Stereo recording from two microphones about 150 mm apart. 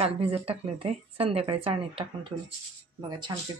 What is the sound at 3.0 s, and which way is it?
Speech, 30° right (ahead or behind).